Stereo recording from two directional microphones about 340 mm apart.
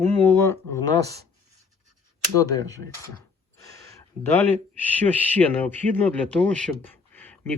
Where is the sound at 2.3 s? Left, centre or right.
Centre.